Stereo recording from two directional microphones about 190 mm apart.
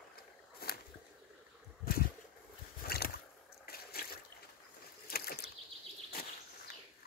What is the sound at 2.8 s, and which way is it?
Rowboat, 55° left (ahead or behind).